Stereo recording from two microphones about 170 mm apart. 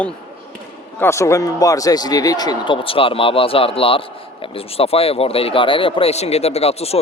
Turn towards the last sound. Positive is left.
turn(degrees=35)  # may be behind; listen again after turning